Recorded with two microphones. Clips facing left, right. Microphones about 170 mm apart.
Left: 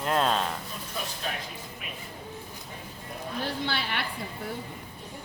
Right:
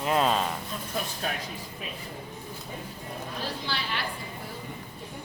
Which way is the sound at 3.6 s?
60° left (ahead or behind).